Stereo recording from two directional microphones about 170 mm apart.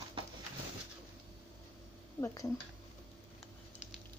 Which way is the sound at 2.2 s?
20° left (ahead or behind).